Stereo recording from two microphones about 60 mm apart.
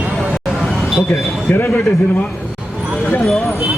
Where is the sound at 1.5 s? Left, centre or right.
Left.